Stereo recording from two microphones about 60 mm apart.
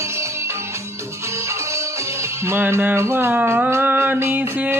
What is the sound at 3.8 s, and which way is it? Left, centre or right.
Music, right.